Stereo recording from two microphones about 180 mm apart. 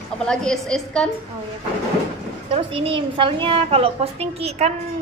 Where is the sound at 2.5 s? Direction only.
30° right (ahead or behind).